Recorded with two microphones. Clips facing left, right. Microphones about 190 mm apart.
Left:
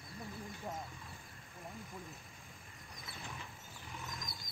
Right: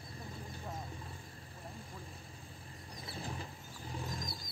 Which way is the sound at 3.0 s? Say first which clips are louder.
Right 6 dB; 30° right (ahead or behind).